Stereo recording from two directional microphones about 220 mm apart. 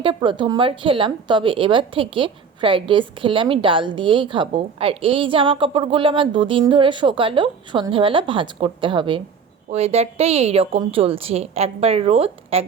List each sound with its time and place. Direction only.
0.0 s speech: 20° right (ahead or behind)